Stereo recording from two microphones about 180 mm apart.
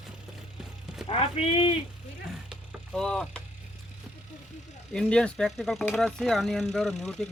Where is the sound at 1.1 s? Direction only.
35° left (ahead or behind).